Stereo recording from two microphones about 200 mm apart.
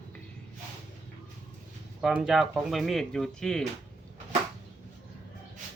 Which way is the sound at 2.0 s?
5° right (ahead or behind).